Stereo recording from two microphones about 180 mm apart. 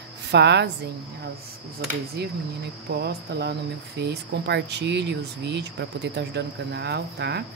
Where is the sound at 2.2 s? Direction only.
65° right (ahead or behind).